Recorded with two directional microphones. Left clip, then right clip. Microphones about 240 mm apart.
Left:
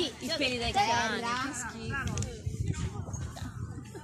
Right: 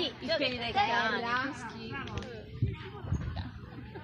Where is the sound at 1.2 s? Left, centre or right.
Left.